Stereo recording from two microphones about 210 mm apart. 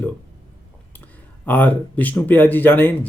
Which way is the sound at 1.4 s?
10° left (ahead or behind).